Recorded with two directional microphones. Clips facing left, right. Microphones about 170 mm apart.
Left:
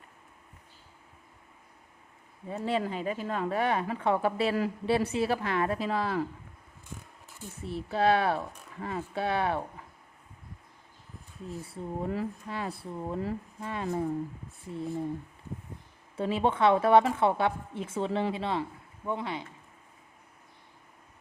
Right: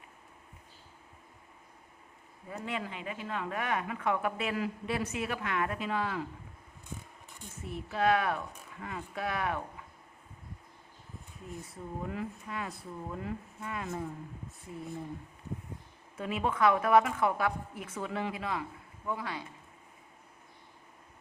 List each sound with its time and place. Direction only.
2.5 s speech: 35° left (ahead or behind)
7.6 s speech: 30° left (ahead or behind)
11.6 s speech: 30° left (ahead or behind)
16.1 s a woman's voice: 30° left (ahead or behind)